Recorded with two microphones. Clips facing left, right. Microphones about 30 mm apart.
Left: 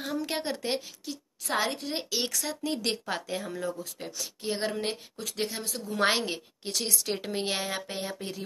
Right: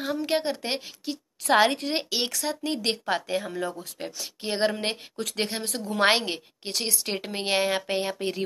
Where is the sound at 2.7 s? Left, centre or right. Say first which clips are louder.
Right 4 dB; right.